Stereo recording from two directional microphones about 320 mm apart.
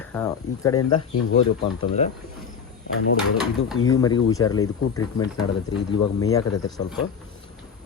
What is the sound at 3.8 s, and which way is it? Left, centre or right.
Speech, left.